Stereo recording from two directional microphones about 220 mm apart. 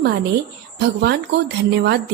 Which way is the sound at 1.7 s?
50° right (ahead or behind).